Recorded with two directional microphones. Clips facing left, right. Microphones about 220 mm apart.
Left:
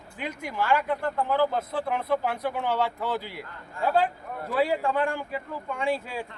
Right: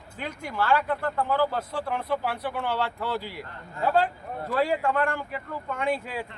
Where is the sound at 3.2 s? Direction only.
40° right (ahead or behind).